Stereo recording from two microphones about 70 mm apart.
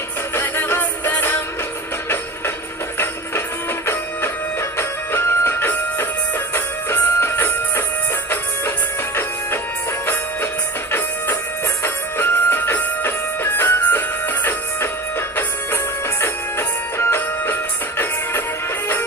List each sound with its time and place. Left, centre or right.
0.3 s music: left
4.8 s music: left
11.8 s music: left
16.2 s music: left